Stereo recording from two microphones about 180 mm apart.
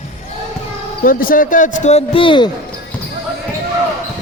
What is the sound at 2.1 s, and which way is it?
Speech, 25° left (ahead or behind).